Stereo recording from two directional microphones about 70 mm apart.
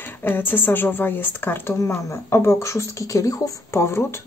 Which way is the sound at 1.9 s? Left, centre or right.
Left.